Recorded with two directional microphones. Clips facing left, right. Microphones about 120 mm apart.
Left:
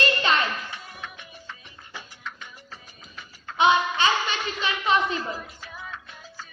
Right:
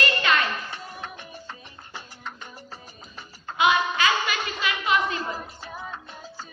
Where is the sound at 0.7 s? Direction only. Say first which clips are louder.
Right 3 dB; 35° right (ahead or behind).